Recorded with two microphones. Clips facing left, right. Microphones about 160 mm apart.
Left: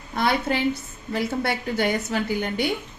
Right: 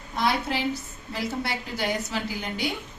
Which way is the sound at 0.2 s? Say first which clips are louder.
Left 3 dB; 55° left (ahead or behind).